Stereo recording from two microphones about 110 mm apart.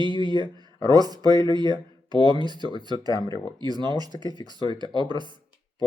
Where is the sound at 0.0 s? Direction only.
45° right (ahead or behind).